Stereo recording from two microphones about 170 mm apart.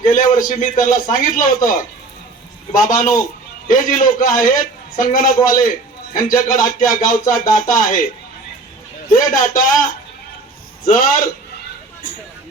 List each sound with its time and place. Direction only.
0.0 s speech: 50° left (ahead or behind)
9.1 s speech: 50° left (ahead or behind)
10.8 s speech: 50° left (ahead or behind)